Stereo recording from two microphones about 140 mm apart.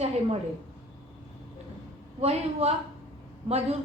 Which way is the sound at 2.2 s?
50° right (ahead or behind).